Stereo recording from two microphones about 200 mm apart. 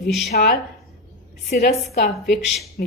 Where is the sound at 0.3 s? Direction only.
45° left (ahead or behind).